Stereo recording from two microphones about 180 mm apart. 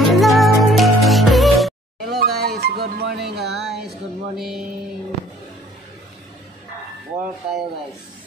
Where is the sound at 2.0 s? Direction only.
60° right (ahead or behind).